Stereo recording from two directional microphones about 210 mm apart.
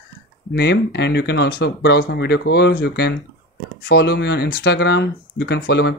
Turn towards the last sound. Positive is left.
turn(degrees=50)  # may be behind; listen again after turning